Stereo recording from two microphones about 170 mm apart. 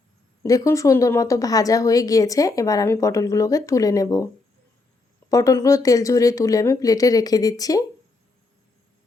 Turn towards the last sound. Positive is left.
turn(degrees=20)  # may be behind; listen again after turning